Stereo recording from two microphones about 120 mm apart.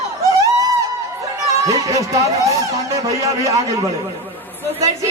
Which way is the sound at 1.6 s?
30° right (ahead or behind).